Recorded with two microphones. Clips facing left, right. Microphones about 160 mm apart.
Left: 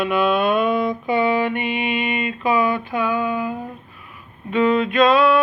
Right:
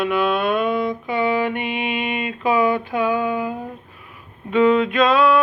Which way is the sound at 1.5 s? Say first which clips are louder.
Left 1 dB; 10° right (ahead or behind).